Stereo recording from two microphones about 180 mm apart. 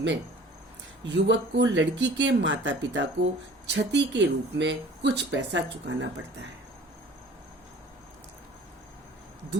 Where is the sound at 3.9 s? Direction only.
75° right (ahead or behind).